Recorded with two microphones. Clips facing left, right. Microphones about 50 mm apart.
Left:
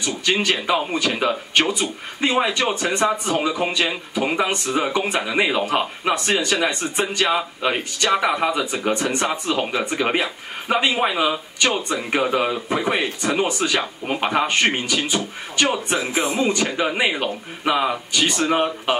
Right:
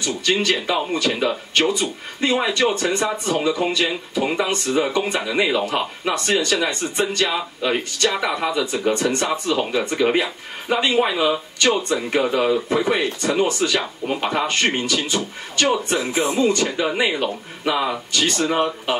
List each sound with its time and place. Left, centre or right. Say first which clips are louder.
0.0 s speech: right 1 dB; centre